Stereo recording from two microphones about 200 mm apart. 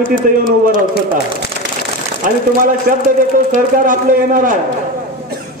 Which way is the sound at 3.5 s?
45° right (ahead or behind).